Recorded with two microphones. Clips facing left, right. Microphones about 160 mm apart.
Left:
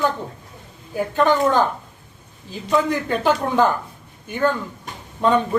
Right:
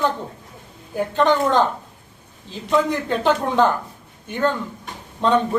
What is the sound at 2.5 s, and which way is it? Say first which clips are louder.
Speech: even; 5° left (ahead or behind).